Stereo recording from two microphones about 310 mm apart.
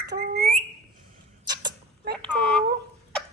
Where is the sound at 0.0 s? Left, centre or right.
Right.